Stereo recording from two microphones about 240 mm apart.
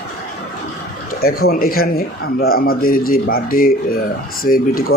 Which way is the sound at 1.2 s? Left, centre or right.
Left.